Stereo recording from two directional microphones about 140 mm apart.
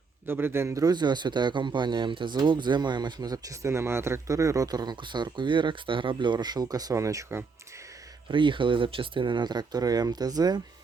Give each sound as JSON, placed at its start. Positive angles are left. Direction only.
{"t": 0.3, "sound": "a man's voice", "side_deg": -15}
{"t": 8.3, "sound": "a man's voice", "side_deg": -35}